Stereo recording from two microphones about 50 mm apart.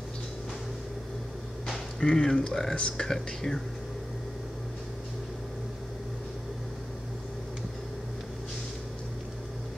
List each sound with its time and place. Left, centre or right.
2.0 s speech: centre
3.1 s speech: centre